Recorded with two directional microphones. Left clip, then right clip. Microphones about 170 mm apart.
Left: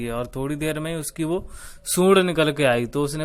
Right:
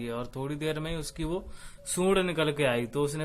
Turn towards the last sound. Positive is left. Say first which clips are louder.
# left 6 dB
turn(degrees=35)  # may be behind; listen again after turning